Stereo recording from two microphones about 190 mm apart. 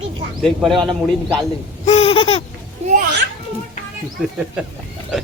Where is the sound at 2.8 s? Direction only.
35° right (ahead or behind).